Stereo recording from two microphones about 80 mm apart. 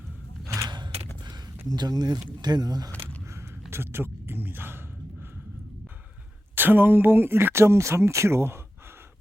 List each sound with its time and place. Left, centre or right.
0.4 s mechanisms: right
1.6 s speech: right
3.3 s a sound: right
6.6 s speech: right